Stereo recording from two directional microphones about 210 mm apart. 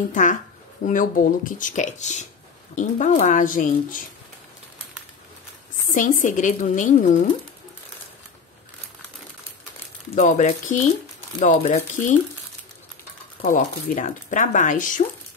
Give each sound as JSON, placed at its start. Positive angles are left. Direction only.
{"t": 0.1, "sound": "speech", "side_deg": 35}
{"t": 5.9, "sound": "speech", "side_deg": 40}
{"t": 10.1, "sound": "speech", "side_deg": 35}
{"t": 13.4, "sound": "speech", "side_deg": 40}